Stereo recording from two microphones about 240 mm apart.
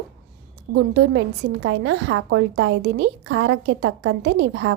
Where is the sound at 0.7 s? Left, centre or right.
Right.